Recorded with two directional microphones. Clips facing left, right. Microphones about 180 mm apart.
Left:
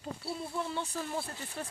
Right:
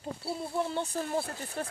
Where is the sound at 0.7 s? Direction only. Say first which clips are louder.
Right 4 dB; 45° right (ahead or behind).